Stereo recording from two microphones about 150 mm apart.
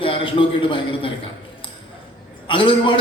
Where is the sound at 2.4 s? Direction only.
35° left (ahead or behind).